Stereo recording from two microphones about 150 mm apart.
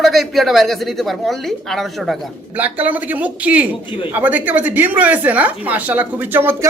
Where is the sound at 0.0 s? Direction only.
Centre (ahead or behind).